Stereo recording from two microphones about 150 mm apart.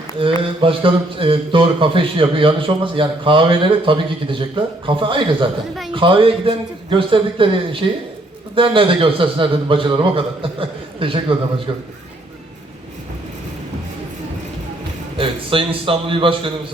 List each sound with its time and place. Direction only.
0.2 s a man's voice: 35° right (ahead or behind)
15.2 s a man's voice: 35° right (ahead or behind)